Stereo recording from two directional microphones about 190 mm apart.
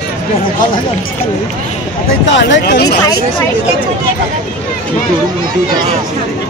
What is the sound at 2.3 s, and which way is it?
Speech, 70° left (ahead or behind).